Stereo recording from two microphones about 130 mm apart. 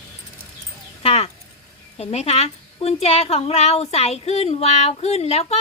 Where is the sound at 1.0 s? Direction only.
50° left (ahead or behind).